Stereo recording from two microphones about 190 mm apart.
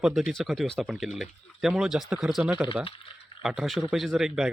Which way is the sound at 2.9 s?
30° left (ahead or behind).